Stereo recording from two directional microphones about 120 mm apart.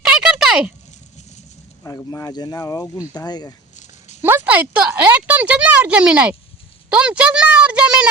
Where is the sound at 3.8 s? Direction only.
75° left (ahead or behind).